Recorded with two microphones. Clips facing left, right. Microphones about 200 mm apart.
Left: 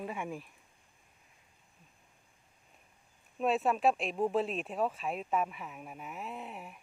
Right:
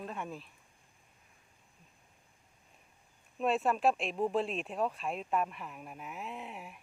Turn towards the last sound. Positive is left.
turn(degrees=0)  # may be behind; listen again after turning